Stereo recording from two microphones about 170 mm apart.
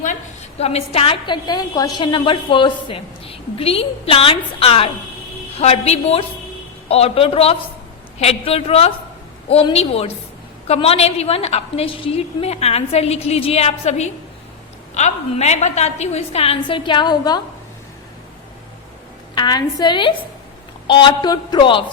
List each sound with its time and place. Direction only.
0.6 s a woman's voice: 35° left (ahead or behind)
19.3 s speech: 25° left (ahead or behind)